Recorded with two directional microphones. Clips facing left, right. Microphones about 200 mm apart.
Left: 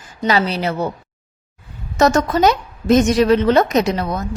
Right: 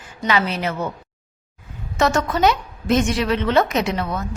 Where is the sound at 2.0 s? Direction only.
40° left (ahead or behind).